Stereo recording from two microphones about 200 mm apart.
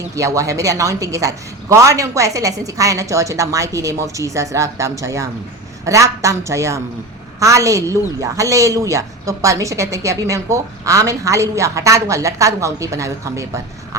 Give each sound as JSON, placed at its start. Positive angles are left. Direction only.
{"t": 0.2, "sound": "a woman's voice", "side_deg": -15}